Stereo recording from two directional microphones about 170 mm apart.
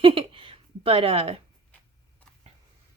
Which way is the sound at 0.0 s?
30° right (ahead or behind).